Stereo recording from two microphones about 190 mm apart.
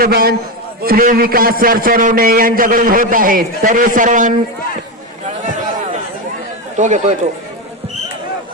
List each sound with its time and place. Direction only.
0.0 s a man's voice: 55° right (ahead or behind)
6.7 s speech: 40° right (ahead or behind)